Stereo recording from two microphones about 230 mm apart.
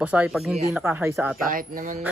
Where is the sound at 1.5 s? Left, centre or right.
Right.